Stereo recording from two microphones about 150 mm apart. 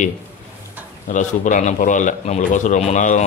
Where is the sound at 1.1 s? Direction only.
55° left (ahead or behind).